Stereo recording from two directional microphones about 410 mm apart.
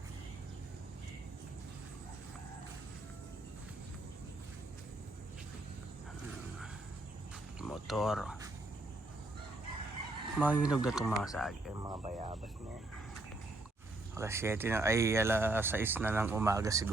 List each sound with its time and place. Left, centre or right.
7.6 s speech: centre
10.3 s speech: centre
14.2 s speech: centre